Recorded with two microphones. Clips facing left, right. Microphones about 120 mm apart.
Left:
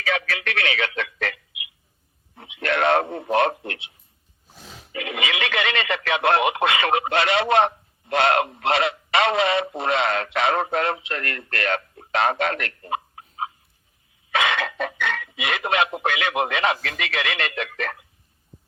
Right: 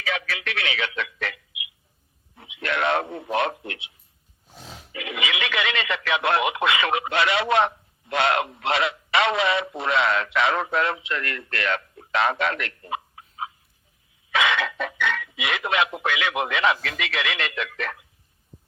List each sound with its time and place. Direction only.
0.0 s a man's voice: 50° left (ahead or behind)
4.9 s a man's voice: 45° left (ahead or behind)
14.3 s a sound: 45° left (ahead or behind)
16.0 s speech: 45° left (ahead or behind)